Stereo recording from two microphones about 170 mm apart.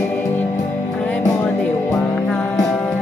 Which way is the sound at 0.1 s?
10° left (ahead or behind).